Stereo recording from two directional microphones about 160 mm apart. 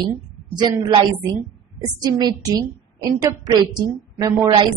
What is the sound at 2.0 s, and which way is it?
A woman's voice, 25° right (ahead or behind).